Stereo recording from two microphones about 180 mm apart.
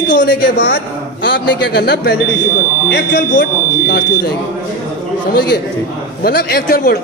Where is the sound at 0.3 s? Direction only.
70° left (ahead or behind).